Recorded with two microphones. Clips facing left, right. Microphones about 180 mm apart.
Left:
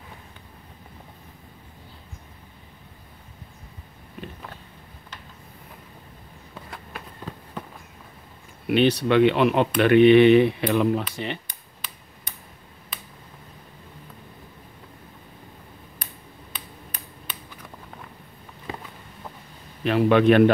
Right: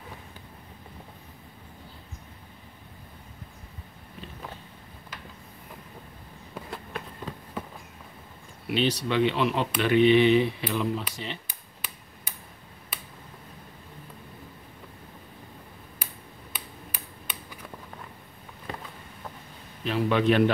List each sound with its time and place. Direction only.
8.6 s speech: 60° left (ahead or behind)
11.4 s tick-tock: 5° right (ahead or behind)
19.8 s speech: 60° left (ahead or behind)